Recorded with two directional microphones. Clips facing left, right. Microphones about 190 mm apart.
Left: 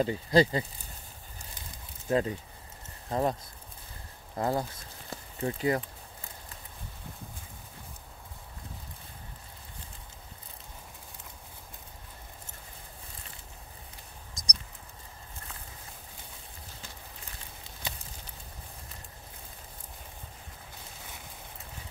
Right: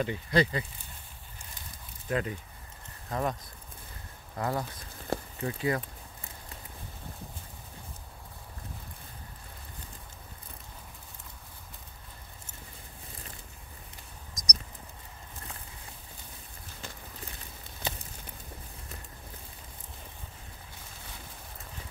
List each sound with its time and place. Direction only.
0.0 s speech: 35° left (ahead or behind)
2.0 s speech: 30° left (ahead or behind)
4.4 s speech: 25° left (ahead or behind)
5.1 s a sound: 60° right (ahead or behind)
5.4 s speech: 30° left (ahead or behind)
14.3 s a sound: 30° left (ahead or behind)